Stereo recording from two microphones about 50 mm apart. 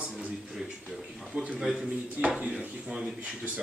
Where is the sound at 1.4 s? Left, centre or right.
Centre.